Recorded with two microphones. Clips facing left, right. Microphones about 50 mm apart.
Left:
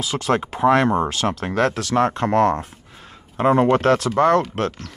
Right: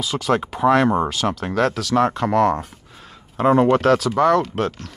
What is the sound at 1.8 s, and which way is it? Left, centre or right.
Speech, centre.